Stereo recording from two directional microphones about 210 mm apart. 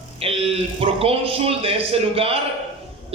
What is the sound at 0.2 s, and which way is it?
A man's voice, 25° right (ahead or behind).